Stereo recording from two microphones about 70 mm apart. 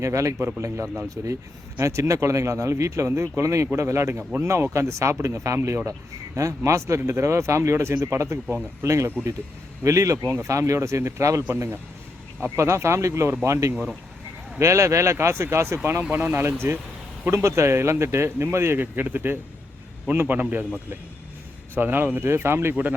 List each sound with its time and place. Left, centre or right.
0.0 s speech: right
1.1 s speech: right
3.1 s speech: right
3.4 s a man's voice: right
21.8 s speech: right
22.7 s a man's voice: right